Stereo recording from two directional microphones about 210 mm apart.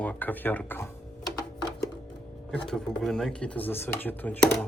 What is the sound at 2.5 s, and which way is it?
Speech, centre (ahead or behind).